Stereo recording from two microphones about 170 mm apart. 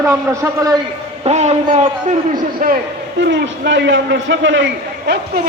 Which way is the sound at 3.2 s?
90° right.